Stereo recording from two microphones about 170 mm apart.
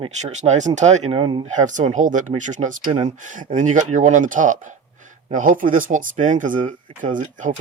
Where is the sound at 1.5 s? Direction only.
45° right (ahead or behind).